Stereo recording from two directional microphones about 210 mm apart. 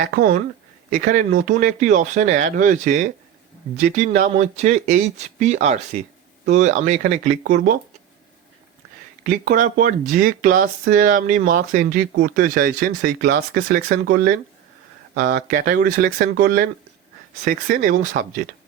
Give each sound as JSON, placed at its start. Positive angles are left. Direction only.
{"t": 0.0, "sound": "speech", "side_deg": -45}
{"t": 9.2, "sound": "speech", "side_deg": -40}